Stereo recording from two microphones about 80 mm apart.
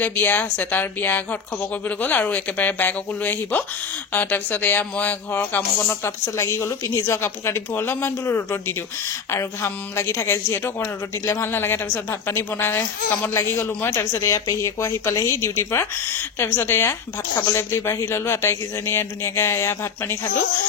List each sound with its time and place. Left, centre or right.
0.0 s speech: left
14.2 s speech: left